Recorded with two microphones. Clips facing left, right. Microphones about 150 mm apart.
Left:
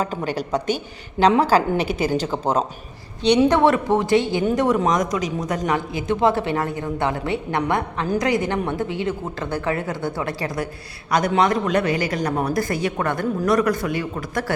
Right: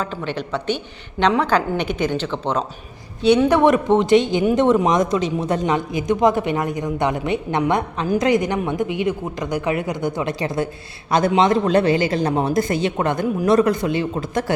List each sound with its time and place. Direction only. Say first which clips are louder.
0.0 s a woman's voice: left 1 dB; 40° left (ahead or behind)
3.5 s a man's voice: right 2 dB; 20° right (ahead or behind)